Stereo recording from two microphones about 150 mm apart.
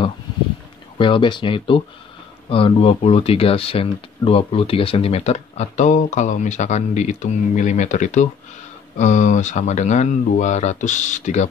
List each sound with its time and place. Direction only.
0.9 s speech: 35° left (ahead or behind); by 11.4 s 55° left (ahead or behind)